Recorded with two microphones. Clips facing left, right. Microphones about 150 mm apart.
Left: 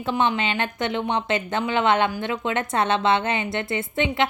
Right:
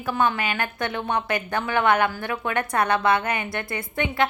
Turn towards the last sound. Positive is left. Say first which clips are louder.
# left 2 dB
turn(degrees=20)  # may be behind; listen again after turning